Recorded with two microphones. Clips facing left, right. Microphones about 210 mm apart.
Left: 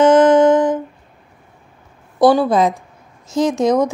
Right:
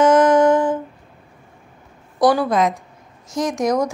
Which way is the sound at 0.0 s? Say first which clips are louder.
Left 3 dB; 25° left (ahead or behind).